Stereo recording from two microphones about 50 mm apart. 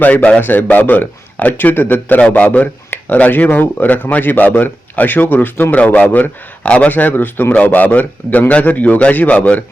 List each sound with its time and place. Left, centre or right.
0.0 s a man's voice: left
5.7 s a man's voice: left
7.5 s a man's voice: left